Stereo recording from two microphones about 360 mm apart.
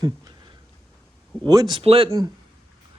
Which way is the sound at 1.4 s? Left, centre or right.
Centre.